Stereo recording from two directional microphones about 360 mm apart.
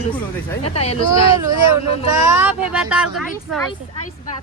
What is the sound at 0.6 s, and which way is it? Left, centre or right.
Speech, centre.